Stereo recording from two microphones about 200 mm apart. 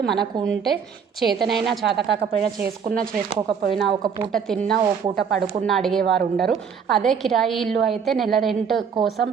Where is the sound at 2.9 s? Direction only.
45° right (ahead or behind).